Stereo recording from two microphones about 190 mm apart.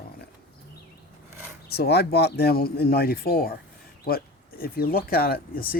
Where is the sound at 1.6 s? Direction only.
55° left (ahead or behind).